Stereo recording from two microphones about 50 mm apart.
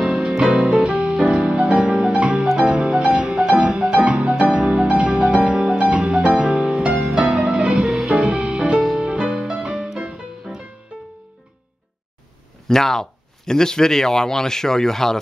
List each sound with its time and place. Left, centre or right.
0.0 s music: centre
0.4 s music: right
7.9 s music: centre
12.6 s speech: centre